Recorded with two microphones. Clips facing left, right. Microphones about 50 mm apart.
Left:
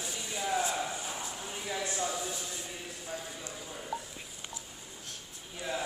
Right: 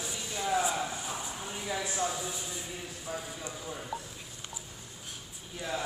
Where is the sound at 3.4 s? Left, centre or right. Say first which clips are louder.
Right 3 dB; centre.